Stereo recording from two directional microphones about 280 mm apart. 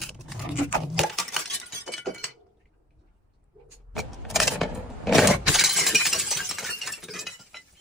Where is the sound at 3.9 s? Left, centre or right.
Centre.